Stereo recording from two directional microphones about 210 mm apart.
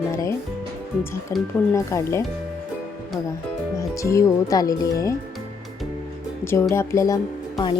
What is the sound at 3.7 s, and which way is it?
Speech, 15° left (ahead or behind).